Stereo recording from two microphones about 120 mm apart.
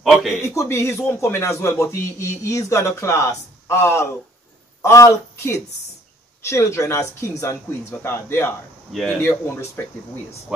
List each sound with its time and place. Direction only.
0.0 s a man's voice: centre (ahead or behind)
0.6 s a man's voice: 25° left (ahead or behind)